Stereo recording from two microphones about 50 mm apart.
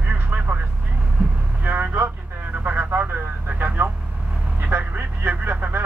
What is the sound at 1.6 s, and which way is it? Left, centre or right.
Vehicle, right.